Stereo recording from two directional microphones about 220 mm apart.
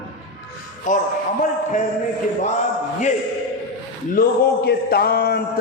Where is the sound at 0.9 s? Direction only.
35° left (ahead or behind).